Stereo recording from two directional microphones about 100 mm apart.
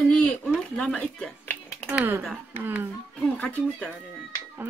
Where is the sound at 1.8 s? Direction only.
15° right (ahead or behind).